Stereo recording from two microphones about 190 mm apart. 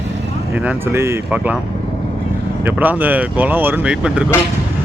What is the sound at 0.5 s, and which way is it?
Speech, 10° right (ahead or behind).